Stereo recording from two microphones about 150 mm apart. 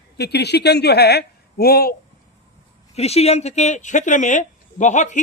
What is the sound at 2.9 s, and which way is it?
Speech, 45° left (ahead or behind).